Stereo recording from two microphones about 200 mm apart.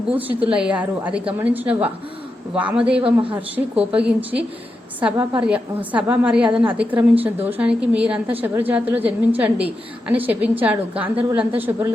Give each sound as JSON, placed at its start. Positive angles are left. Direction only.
{"t": 0.1, "sound": "a woman's voice", "side_deg": -10}